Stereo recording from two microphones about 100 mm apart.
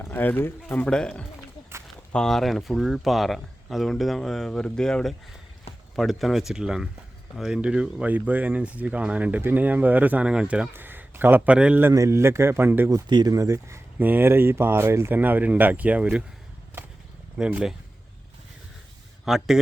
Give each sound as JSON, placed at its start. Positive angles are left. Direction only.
{"t": 0.0, "sound": "speech", "side_deg": 20}
{"t": 0.9, "sound": "speech", "side_deg": 10}
{"t": 11.8, "sound": "speech", "side_deg": -25}
{"t": 13.1, "sound": "speech", "side_deg": -40}
{"t": 19.2, "sound": "speech", "side_deg": -5}